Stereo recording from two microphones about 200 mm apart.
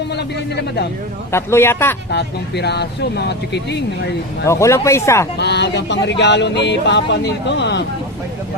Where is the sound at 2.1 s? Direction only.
55° left (ahead or behind).